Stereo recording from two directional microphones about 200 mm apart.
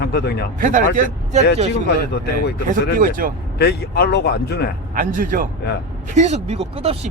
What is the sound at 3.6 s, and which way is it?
Speech, 55° left (ahead or behind).